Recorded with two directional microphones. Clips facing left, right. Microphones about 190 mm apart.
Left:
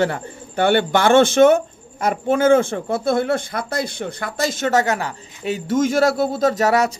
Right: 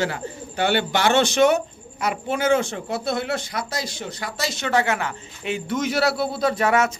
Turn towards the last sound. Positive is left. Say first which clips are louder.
# left 3 dB
turn(degrees=40)  # may be behind; listen again after turning